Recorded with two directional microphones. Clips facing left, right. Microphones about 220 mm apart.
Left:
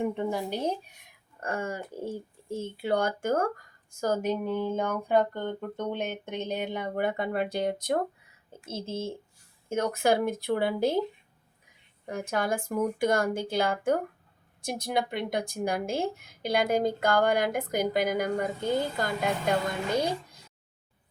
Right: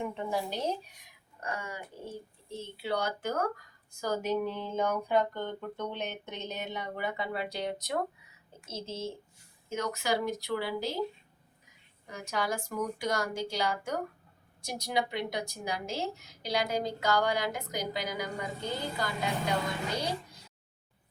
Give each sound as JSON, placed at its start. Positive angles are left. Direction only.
{"t": 0.1, "sound": "a woman's voice", "side_deg": 55}
{"t": 12.0, "sound": "a woman's voice", "side_deg": 55}